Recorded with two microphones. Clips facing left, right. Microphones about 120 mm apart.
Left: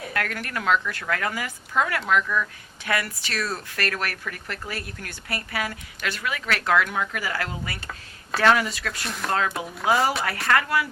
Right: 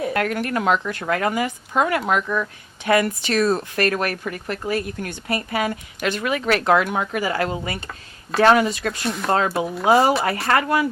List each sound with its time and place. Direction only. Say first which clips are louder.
0.1 s speech: right 7 dB; 25° right (ahead or behind)
9.0 s speech: right 6 dB; centre (ahead or behind)
9.3 s speech: right 5 dB; 30° right (ahead or behind)